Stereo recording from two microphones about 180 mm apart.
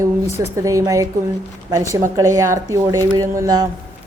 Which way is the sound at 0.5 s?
20° right (ahead or behind).